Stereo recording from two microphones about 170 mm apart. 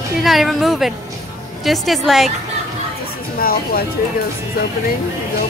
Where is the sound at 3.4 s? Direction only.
60° left (ahead or behind).